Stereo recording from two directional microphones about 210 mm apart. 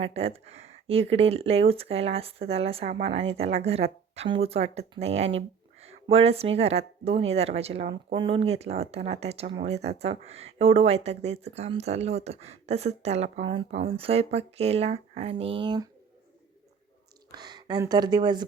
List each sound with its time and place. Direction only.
0.0 s speech: 30° right (ahead or behind)
17.3 s speech: 20° right (ahead or behind)